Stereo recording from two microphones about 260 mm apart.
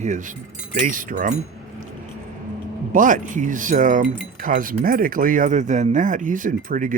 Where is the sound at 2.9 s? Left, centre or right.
Right.